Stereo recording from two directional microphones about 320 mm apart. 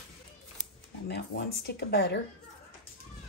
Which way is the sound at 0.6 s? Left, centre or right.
Left.